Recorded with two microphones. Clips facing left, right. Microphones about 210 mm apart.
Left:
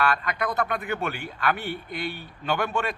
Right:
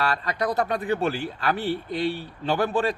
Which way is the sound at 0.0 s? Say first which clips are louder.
Even; 35° right (ahead or behind).